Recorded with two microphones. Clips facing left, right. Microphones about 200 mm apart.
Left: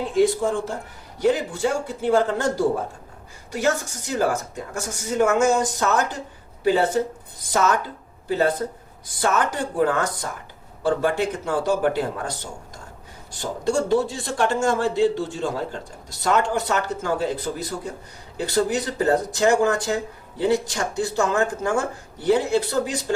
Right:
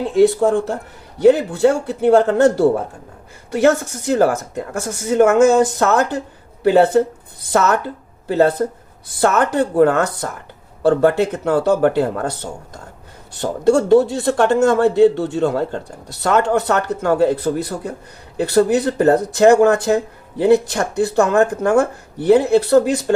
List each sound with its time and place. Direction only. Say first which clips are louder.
0.2 s speech: right 7 dB; 65° right (ahead or behind)
8.3 s speech: right 6 dB; 60° right (ahead or behind)